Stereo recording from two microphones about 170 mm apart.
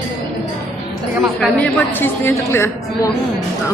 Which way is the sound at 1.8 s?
10° left (ahead or behind).